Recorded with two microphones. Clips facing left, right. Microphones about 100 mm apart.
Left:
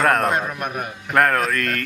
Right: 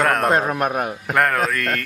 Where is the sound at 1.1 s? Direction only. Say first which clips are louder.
Left 1 dB; centre (ahead or behind).